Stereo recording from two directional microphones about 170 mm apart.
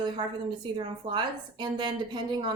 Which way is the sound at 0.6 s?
25° right (ahead or behind).